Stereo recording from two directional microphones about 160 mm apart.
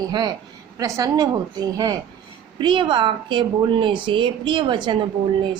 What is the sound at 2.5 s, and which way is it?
A woman's voice, 30° right (ahead or behind).